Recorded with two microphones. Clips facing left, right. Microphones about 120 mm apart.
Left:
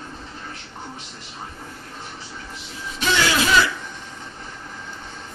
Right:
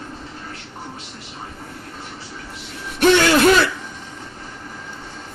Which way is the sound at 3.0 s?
55° right (ahead or behind).